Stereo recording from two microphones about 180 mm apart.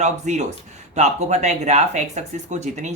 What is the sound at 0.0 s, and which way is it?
Speech, 40° right (ahead or behind).